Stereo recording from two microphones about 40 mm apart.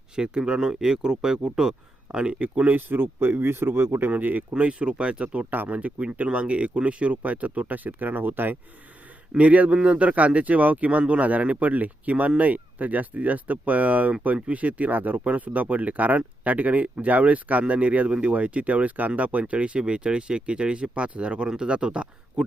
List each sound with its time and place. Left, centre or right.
0.2 s speech: right
2.1 s speech: right
2.6 s speech: right
4.1 s speech: right
4.5 s speech: right
9.4 s speech: right
15.2 s speech: right